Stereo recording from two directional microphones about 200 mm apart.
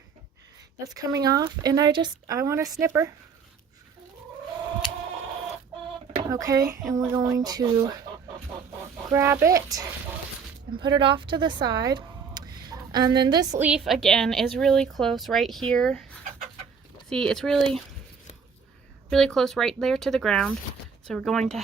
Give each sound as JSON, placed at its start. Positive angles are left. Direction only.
{"t": 0.9, "sound": "speech", "side_deg": -15}
{"t": 6.3, "sound": "speech", "side_deg": -15}
{"t": 9.0, "sound": "speech", "side_deg": -15}
{"t": 13.7, "sound": "speech", "side_deg": 0}
{"t": 19.1, "sound": "speech", "side_deg": 0}